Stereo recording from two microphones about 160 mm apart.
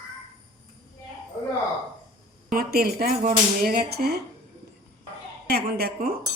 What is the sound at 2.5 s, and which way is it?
Speech, 75° right (ahead or behind).